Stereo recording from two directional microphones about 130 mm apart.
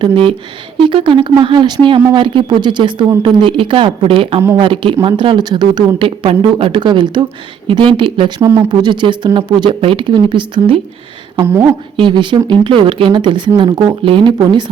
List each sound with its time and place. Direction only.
0.0 s speech: 40° right (ahead or behind)
8.4 s speech: 20° right (ahead or behind)
8.7 s speech: 35° right (ahead or behind)
11.3 s speech: 20° right (ahead or behind)
11.6 s speech: 40° right (ahead or behind)